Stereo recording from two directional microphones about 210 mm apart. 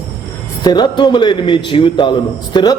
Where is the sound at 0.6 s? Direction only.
20° left (ahead or behind).